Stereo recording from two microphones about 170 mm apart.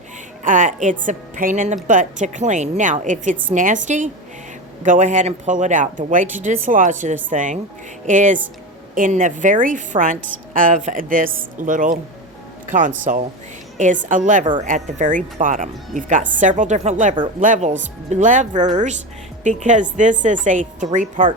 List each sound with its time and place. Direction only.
0.4 s a woman's voice: 50° right (ahead or behind)
13.1 s a woman's voice: 45° right (ahead or behind)